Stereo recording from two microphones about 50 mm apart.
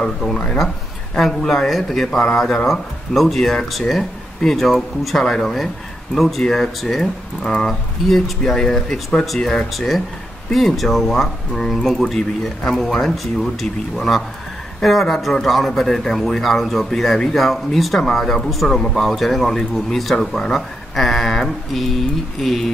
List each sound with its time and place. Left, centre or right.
1.1 s a man's voice: centre
7.4 s a man's voice: centre